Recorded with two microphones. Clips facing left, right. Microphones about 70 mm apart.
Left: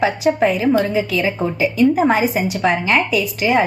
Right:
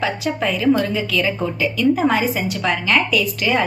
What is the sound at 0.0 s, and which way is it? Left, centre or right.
Speech, left.